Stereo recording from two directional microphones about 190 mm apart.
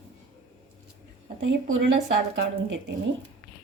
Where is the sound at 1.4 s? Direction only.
75° right (ahead or behind).